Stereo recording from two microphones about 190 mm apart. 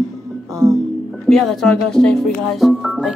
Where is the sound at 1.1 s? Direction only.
Centre (ahead or behind).